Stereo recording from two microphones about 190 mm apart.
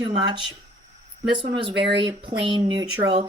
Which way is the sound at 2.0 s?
25° right (ahead or behind).